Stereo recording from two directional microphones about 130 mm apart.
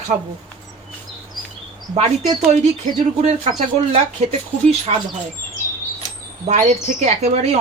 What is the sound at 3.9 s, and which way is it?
Speech, 55° right (ahead or behind).